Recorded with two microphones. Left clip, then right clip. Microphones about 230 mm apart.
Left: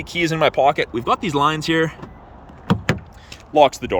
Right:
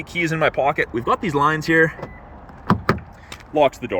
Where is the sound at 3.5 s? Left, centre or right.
Centre.